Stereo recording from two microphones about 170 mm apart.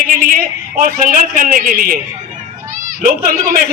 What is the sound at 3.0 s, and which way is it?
Speech, 55° right (ahead or behind).